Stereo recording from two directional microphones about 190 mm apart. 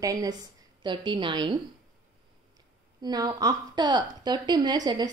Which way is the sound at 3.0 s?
20° right (ahead or behind).